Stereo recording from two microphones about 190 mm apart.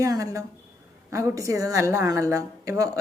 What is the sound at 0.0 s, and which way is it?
A woman's voice, 20° right (ahead or behind).